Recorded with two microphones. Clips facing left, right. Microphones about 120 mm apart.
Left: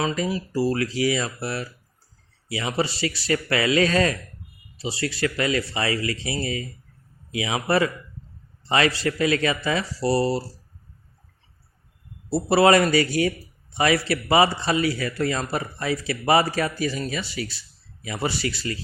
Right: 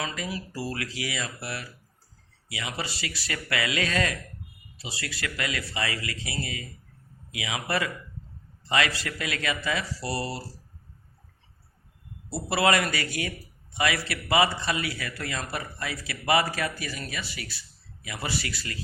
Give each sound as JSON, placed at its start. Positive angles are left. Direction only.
{"t": 0.0, "sound": "a man's voice", "side_deg": 30}
{"t": 12.3, "sound": "a man's voice", "side_deg": 30}